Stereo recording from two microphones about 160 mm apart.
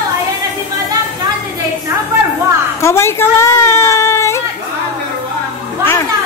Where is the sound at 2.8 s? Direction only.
15° left (ahead or behind).